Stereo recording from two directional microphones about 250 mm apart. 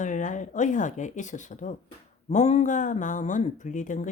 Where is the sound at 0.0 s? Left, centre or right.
Left.